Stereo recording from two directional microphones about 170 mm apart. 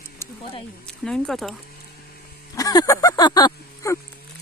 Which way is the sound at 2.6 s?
20° left (ahead or behind).